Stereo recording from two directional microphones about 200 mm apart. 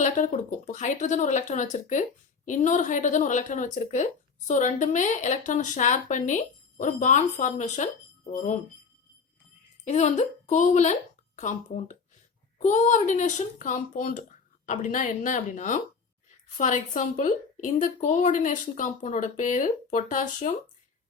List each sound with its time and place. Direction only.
0.7 s speech: 40° left (ahead or behind)
9.8 s speech: 35° left (ahead or behind)